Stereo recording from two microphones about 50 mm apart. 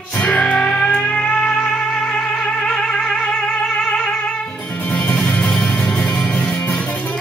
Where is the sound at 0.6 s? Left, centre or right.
Centre.